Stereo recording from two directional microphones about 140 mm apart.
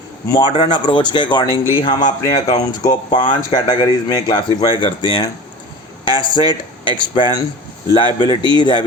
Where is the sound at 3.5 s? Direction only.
25° left (ahead or behind).